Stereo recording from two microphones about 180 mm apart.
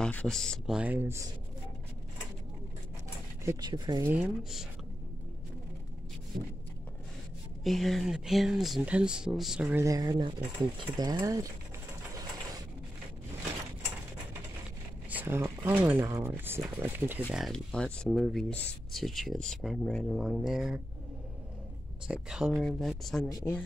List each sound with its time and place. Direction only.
0.0 s speech: 5° left (ahead or behind); by 1.2 s 10° right (ahead or behind)
3.4 s speech: 20° right (ahead or behind)
4.1 s speech: 5° right (ahead or behind)
7.6 s speech: centre (ahead or behind); by 11.5 s 20° right (ahead or behind)
15.0 s speech: 10° right (ahead or behind)
17.3 s speech: centre (ahead or behind)
22.0 s speech: 5° right (ahead or behind)
23.2 s speech: 15° left (ahead or behind)